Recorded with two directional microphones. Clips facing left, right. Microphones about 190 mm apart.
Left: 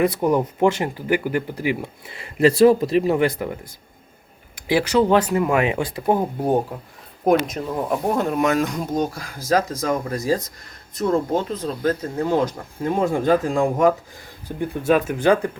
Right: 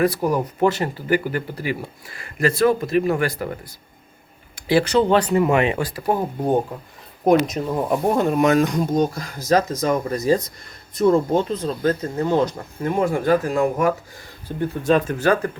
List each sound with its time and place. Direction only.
0.0 s speech: 20° left (ahead or behind)
4.7 s speech: 10° left (ahead or behind)
7.3 s speech: 5° right (ahead or behind); by 15.5 s 15° left (ahead or behind)